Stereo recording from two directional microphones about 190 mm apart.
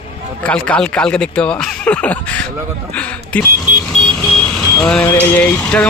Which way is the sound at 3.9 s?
90° right.